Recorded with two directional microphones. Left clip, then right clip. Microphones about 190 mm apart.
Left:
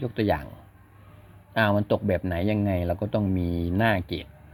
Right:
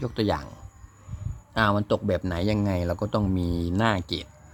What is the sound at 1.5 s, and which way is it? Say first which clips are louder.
Speech: even; 10° right (ahead or behind).